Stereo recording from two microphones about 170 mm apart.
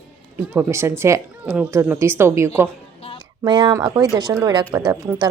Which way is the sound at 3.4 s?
25° right (ahead or behind).